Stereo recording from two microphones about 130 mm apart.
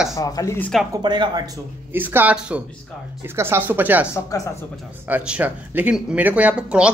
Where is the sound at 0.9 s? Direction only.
35° right (ahead or behind).